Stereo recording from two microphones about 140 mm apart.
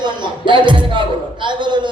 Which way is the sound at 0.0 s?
35° right (ahead or behind).